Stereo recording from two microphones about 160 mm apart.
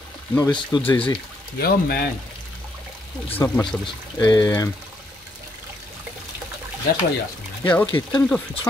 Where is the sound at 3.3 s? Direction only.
15° left (ahead or behind).